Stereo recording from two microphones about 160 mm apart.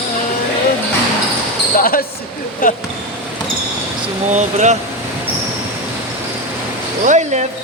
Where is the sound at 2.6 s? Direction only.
60° left (ahead or behind).